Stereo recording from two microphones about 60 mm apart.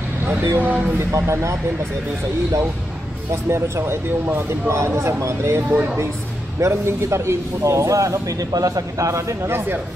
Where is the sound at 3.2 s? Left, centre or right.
Right.